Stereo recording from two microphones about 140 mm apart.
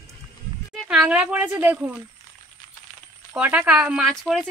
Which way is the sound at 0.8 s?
5° right (ahead or behind).